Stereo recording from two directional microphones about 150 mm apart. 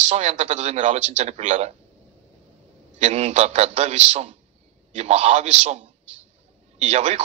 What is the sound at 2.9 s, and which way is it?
Speech, 45° right (ahead or behind).